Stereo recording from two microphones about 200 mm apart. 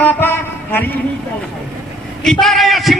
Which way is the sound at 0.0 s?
10° left (ahead or behind).